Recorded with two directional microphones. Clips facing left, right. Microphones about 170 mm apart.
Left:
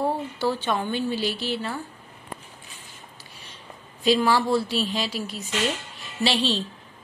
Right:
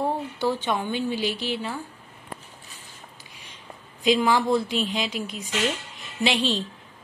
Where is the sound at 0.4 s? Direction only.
15° right (ahead or behind).